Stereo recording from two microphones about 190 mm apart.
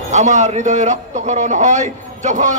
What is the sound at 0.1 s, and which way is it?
A man's voice, 40° right (ahead or behind).